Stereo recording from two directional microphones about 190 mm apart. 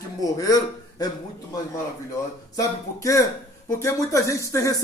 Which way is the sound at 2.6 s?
15° left (ahead or behind).